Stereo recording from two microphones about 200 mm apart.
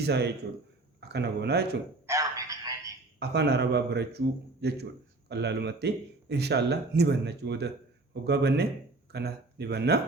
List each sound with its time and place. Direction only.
0.0 s speech: 55° right (ahead or behind)
2.0 s telephone: 15° right (ahead or behind)
3.2 s speech: 55° right (ahead or behind)